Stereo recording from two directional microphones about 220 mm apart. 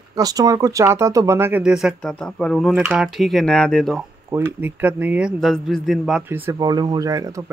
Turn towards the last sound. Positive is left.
turn(degrees=-15)  # may be behind; listen again after turning